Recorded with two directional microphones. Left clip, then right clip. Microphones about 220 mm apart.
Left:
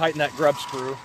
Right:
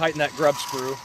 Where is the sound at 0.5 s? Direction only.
35° right (ahead or behind).